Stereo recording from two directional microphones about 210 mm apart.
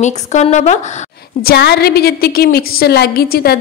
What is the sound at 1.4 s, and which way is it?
A woman's voice, 50° left (ahead or behind).